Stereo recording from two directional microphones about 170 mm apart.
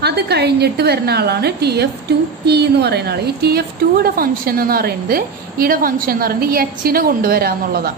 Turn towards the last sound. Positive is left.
turn(degrees=-65)  # may be behind; listen again after turning